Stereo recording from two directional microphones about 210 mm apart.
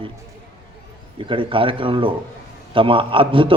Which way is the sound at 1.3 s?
25° right (ahead or behind).